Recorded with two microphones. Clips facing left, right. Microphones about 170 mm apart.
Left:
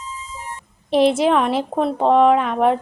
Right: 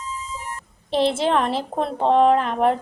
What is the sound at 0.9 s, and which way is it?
Speech, 30° right (ahead or behind).